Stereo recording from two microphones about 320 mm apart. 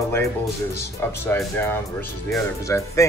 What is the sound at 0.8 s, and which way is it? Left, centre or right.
Speech, centre.